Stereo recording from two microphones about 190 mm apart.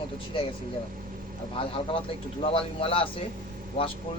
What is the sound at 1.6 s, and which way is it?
Speech, 30° left (ahead or behind).